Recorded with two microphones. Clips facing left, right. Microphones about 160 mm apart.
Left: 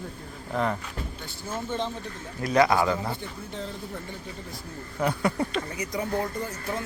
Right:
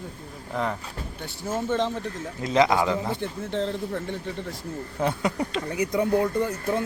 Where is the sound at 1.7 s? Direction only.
90° right.